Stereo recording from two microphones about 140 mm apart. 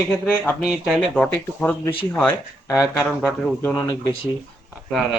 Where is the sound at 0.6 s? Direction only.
5° right (ahead or behind).